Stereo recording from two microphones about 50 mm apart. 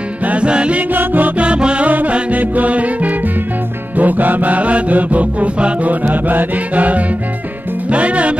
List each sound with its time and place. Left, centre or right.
0.2 s music: right
0.7 s music: right
1.4 s music: right